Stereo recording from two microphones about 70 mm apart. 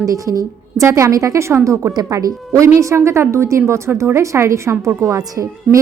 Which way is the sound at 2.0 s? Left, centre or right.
Right.